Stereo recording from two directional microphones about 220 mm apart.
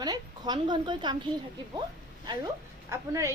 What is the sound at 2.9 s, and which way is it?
Speech, 15° right (ahead or behind).